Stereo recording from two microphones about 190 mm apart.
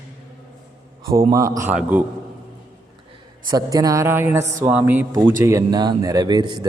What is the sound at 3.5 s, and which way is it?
A man's voice, 20° right (ahead or behind).